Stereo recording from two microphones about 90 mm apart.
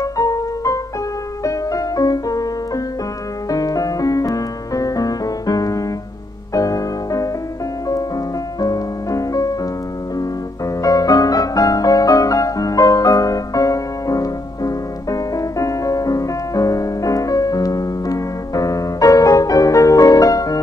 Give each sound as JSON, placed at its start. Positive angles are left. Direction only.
{"t": 0.0, "sound": "piano", "side_deg": 40}
{"t": 1.4, "sound": "music", "side_deg": 40}
{"t": 8.5, "sound": "music", "side_deg": 45}
{"t": 10.8, "sound": "music", "side_deg": 40}